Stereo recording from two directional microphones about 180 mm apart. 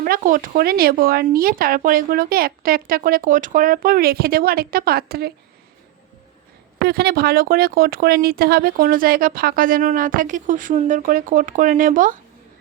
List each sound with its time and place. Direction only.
0.0 s speech: 50° right (ahead or behind)
6.8 s speech: 60° right (ahead or behind)